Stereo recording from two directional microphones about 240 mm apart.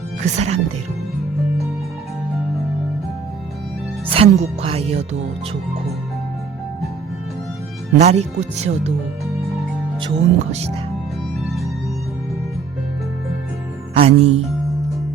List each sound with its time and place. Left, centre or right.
0.3 s speech: right
4.1 s speech: right
7.9 s speech: right
10.0 s speech: right
13.9 s speech: right